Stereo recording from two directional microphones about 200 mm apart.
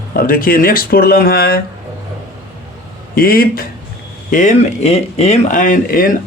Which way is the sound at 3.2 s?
45° left (ahead or behind).